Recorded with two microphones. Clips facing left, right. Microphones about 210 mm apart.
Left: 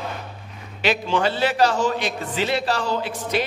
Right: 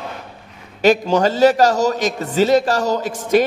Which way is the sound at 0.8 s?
45° right (ahead or behind).